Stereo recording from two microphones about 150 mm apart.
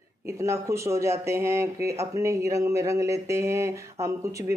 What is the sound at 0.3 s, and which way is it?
Speech, 20° right (ahead or behind).